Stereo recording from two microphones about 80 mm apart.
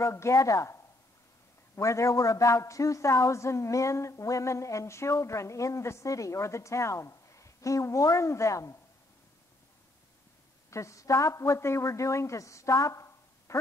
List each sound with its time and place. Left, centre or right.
0.0 s a woman's voice: left
1.8 s a woman's voice: left
10.7 s speech: left